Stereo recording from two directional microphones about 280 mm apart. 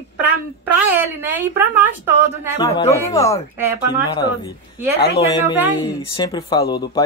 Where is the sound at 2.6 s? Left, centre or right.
Centre.